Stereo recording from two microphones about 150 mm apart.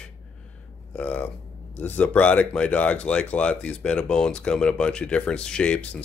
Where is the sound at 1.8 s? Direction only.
10° left (ahead or behind).